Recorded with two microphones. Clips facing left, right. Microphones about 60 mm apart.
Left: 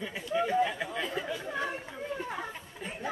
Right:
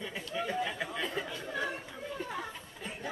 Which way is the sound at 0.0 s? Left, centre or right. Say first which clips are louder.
Left 5 dB; centre.